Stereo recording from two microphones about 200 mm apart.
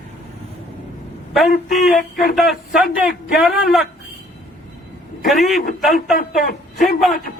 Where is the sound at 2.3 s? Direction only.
Centre (ahead or behind).